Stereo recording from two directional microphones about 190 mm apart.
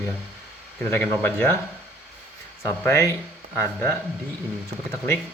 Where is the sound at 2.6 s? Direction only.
10° left (ahead or behind).